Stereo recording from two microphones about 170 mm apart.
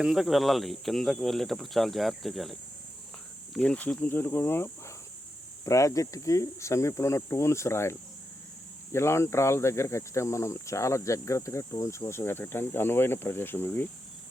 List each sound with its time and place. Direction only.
0.0 s speech: centre (ahead or behind)